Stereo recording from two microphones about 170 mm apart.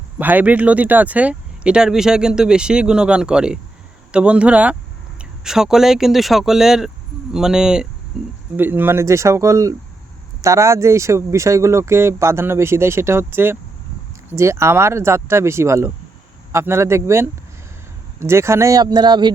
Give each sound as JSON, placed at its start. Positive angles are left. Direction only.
{"t": 0.2, "sound": "speech", "side_deg": -10}